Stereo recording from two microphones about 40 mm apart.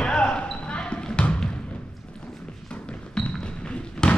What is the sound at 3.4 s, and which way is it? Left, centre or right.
Thump, left.